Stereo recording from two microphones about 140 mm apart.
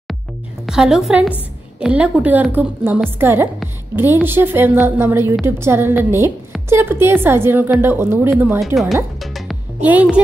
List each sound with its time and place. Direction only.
0.7 s a woman's voice: 5° right (ahead or behind)
8.5 s a woman's voice: centre (ahead or behind)
9.2 s music: centre (ahead or behind)
9.8 s a child's voice: 10° right (ahead or behind)